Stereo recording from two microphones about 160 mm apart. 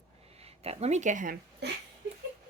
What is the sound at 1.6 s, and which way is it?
Speech, 90° right.